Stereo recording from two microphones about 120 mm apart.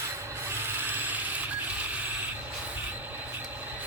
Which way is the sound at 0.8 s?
15° right (ahead or behind).